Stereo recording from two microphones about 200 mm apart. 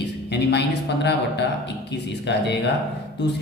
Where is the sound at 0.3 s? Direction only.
60° left (ahead or behind).